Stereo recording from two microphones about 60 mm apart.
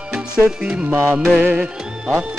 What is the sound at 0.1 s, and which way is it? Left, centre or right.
Music, centre.